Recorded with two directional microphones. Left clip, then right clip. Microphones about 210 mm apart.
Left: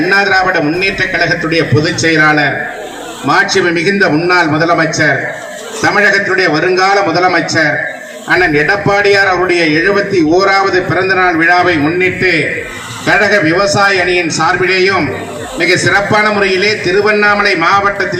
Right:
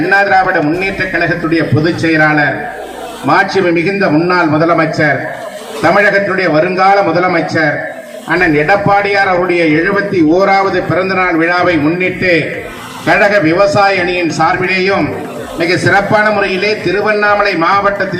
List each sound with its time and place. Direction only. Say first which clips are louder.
0.1 s a man's voice: right 1 dB; 45° left (ahead or behind)